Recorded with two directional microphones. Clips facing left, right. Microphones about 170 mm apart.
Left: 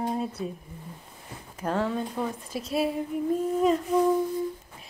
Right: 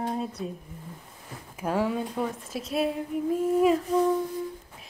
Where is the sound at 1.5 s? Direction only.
10° right (ahead or behind).